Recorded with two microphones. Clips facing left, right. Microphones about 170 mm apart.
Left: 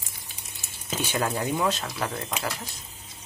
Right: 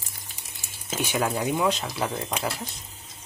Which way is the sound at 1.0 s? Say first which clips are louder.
Right 2 dB; 10° right (ahead or behind).